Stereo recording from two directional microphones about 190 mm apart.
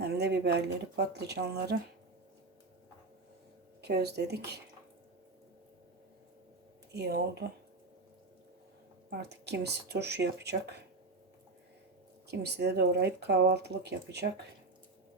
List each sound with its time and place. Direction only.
0.0 s speech: 60° right (ahead or behind)
3.8 s speech: 60° right (ahead or behind)
6.9 s speech: 60° right (ahead or behind)
9.0 s speech: 60° right (ahead or behind)
12.3 s speech: 60° right (ahead or behind)